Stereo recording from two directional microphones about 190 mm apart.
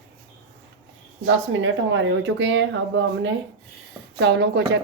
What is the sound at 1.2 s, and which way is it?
Speech, 90° right.